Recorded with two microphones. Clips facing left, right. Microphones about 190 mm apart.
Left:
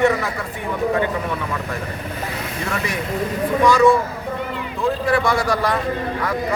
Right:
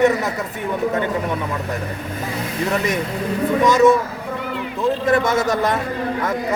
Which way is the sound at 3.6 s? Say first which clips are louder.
Right 1 dB; 20° right (ahead or behind).